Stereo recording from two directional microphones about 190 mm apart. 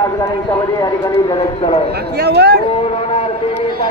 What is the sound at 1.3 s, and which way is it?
Speech, 30° left (ahead or behind).